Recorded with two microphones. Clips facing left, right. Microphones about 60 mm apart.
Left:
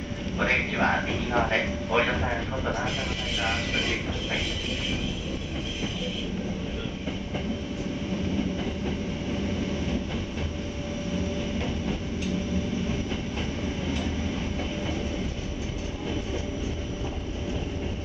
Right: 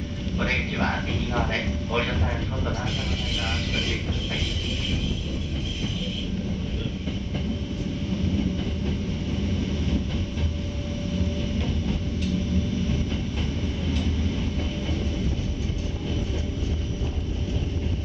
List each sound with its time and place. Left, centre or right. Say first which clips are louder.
0.4 s a man's voice: left 2 dB; centre